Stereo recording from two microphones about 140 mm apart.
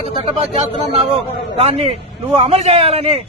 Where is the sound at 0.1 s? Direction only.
45° right (ahead or behind).